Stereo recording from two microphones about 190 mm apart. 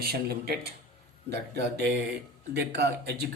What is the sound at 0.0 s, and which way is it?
Speech, 55° right (ahead or behind).